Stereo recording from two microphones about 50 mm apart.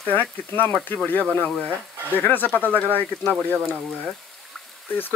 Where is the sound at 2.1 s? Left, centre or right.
Left.